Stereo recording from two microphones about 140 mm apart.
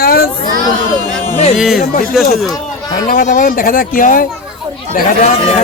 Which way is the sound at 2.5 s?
30° left (ahead or behind).